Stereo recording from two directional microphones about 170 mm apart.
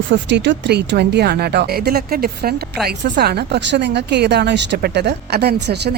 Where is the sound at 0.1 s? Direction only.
90° right.